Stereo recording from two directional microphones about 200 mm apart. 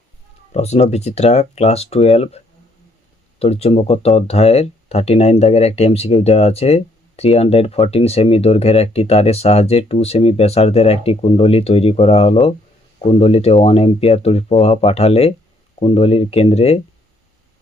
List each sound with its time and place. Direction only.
0.5 s speech: 35° left (ahead or behind)